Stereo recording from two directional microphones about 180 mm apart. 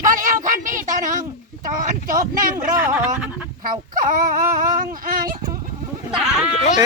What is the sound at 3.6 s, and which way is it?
Speech, 50° right (ahead or behind).